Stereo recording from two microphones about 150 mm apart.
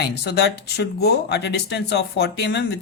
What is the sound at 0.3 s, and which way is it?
Speech, 90° left.